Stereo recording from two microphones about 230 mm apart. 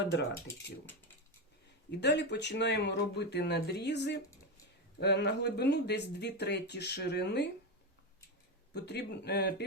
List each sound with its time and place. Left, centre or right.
0.0 s speech: left
0.3 s speech: centre
1.9 s speech: left
8.7 s speech: left